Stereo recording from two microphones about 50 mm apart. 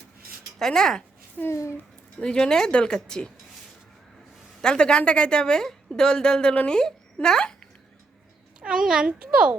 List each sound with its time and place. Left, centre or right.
0.6 s a woman's voice: centre
1.5 s speech: left
2.1 s a woman's voice: centre
4.6 s a woman's voice: centre
8.6 s a child's voice: centre